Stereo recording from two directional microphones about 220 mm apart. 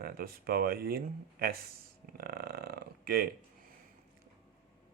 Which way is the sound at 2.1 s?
45° right (ahead or behind).